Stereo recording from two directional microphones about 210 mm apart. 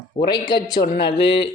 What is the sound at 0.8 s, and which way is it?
Speech, 35° left (ahead or behind).